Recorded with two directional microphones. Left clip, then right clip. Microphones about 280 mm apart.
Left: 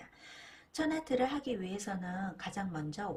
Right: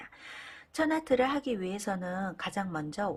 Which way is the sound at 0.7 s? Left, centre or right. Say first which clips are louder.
Right 6 dB; centre.